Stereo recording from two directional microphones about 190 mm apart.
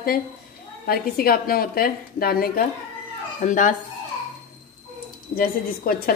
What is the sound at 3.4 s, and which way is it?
Speech, 40° left (ahead or behind).